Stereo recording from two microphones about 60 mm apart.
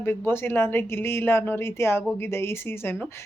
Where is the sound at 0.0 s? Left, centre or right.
Left.